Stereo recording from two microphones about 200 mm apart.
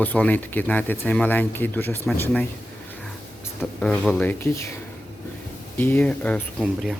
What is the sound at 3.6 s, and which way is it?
Speech, 5° left (ahead or behind).